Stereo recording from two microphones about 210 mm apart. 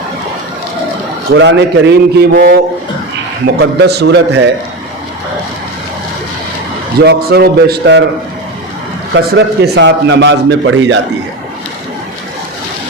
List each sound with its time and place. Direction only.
1.3 s a man's voice: 55° right (ahead or behind)
7.0 s a man's voice: 50° right (ahead or behind)
9.1 s a man's voice: 55° right (ahead or behind)